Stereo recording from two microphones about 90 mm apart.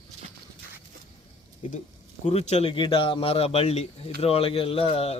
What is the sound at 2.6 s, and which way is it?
A man's voice, 80° left.